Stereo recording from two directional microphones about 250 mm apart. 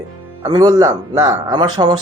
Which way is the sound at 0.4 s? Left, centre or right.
Centre.